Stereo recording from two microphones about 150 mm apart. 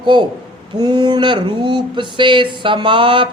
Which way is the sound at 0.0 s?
30° right (ahead or behind).